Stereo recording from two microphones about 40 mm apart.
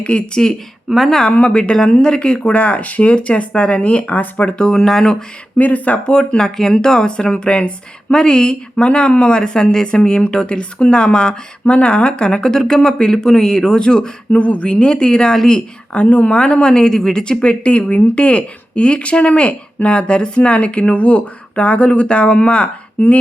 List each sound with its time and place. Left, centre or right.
0.0 s speech: left
0.9 s speech: centre
1.3 s speech: left
4.4 s speech: left
4.7 s speech: centre
5.5 s speech: left
6.1 s speech: left
14.3 s speech: left
15.9 s speech: left
16.4 s speech: left
23.0 s speech: left